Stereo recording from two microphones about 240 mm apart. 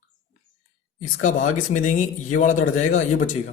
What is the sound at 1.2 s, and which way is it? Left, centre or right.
A man's voice, left.